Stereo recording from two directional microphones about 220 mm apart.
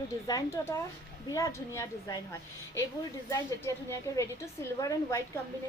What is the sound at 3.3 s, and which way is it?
A woman's voice, 15° left (ahead or behind).